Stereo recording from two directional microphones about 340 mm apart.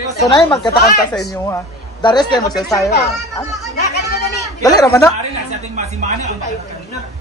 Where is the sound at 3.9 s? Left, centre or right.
Left.